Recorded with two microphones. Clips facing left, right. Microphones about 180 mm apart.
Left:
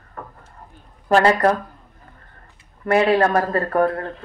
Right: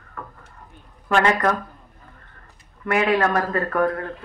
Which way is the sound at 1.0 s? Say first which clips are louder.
Left 4 dB; 35° left (ahead or behind).